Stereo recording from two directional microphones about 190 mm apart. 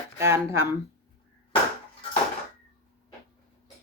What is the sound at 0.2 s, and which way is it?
Speech, 15° right (ahead or behind).